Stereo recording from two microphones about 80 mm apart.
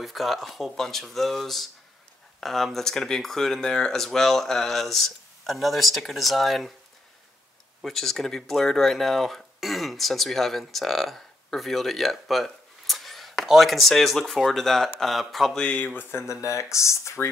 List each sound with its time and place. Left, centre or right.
0.0 s speech: centre
7.8 s speech: centre
16.0 s speech: left